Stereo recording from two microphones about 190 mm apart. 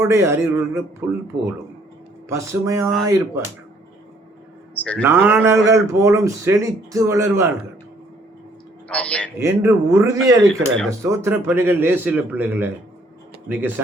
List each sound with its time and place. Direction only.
0.0 s speech: 15° right (ahead or behind)
2.3 s speech: 15° right (ahead or behind)
4.7 s a sound: 5° left (ahead or behind)
5.0 s speech: 15° right (ahead or behind)
8.9 s a man's voice: 5° left (ahead or behind)
9.4 s speech: 15° right (ahead or behind)
10.5 s speech: 5° left (ahead or behind)
11.0 s speech: 15° right (ahead or behind)